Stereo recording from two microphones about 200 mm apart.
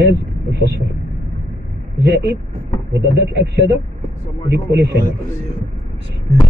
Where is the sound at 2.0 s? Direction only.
55° right (ahead or behind).